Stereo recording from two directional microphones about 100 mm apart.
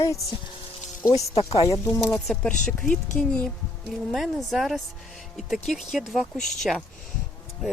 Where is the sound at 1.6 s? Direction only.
30° left (ahead or behind).